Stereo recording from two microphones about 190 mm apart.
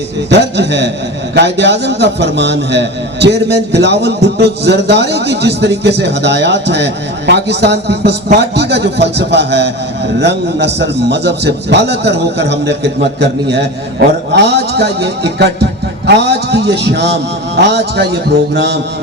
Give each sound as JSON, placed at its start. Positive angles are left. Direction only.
{"t": 0.3, "sound": "a man's voice", "side_deg": -65}